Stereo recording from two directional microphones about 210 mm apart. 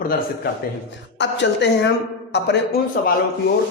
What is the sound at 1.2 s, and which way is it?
Speech, 55° left (ahead or behind).